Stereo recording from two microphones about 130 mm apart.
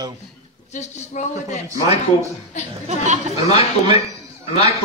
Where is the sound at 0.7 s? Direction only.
65° left (ahead or behind).